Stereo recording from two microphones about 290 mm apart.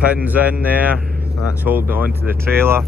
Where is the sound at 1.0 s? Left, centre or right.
Right.